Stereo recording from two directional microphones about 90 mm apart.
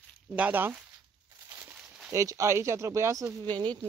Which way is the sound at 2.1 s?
35° right (ahead or behind).